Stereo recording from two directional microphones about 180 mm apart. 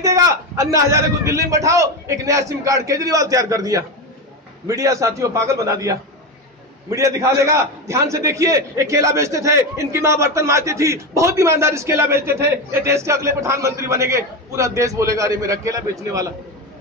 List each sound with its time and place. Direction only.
0.0 s a man's voice: 20° right (ahead or behind)